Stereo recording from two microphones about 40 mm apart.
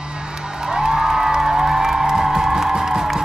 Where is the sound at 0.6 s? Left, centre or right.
Centre.